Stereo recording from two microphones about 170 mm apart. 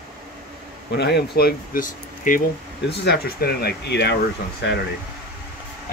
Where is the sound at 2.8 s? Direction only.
70° left (ahead or behind).